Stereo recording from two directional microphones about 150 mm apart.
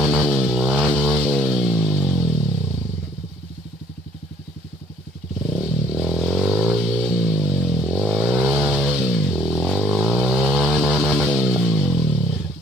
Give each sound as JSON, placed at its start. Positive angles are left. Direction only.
{"t": 0.0, "sound": "music", "side_deg": 0}
{"t": 5.6, "sound": "vehicle", "side_deg": -5}